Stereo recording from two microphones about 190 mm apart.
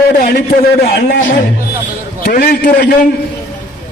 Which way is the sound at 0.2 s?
55° left (ahead or behind).